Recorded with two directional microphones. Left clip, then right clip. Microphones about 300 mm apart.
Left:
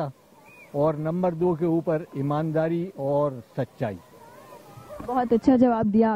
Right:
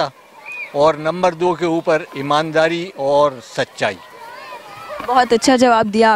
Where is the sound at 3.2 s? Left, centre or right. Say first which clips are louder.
Right 11 dB; centre.